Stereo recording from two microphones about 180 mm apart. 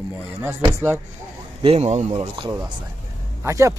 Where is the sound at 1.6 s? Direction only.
35° right (ahead or behind).